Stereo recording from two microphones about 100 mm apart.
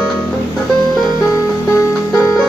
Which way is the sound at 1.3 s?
35° left (ahead or behind).